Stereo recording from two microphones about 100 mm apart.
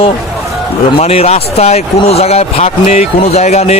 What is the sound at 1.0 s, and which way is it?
Speech, 90° left.